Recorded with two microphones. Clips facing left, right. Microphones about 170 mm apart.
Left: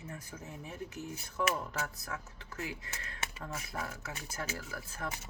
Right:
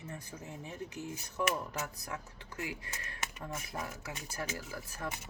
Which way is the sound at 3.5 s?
20° right (ahead or behind).